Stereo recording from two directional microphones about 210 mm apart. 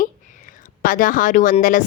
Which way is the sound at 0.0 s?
40° left (ahead or behind).